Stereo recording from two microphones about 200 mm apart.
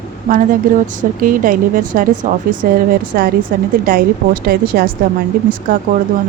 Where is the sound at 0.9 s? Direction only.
40° right (ahead or behind).